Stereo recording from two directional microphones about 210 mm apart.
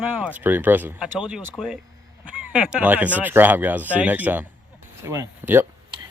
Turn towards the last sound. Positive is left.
turn(degrees=-10)  # may be behind; listen again after turning